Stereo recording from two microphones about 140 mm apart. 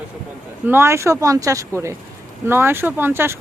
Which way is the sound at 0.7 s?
20° right (ahead or behind).